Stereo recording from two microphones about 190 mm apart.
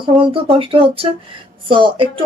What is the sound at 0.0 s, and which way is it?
Speech, 25° right (ahead or behind).